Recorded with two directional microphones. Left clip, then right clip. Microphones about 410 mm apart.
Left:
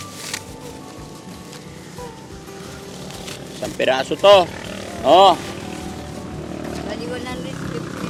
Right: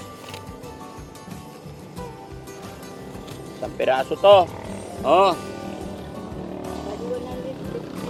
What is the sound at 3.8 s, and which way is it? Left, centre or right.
Speech, centre.